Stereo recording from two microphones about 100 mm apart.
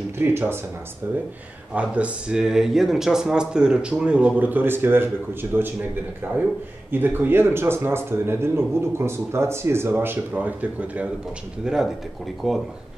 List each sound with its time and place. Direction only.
0.2 s speech: 20° right (ahead or behind)
1.8 s speech: 10° right (ahead or behind)
6.9 s speech: 20° right (ahead or behind); by 12.6 s centre (ahead or behind)